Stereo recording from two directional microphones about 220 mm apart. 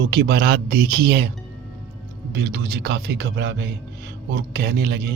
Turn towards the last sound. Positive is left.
turn(degrees=-45)  # may be behind; listen again after turning